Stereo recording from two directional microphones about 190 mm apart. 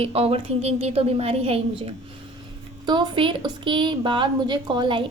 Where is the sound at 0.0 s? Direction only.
30° right (ahead or behind).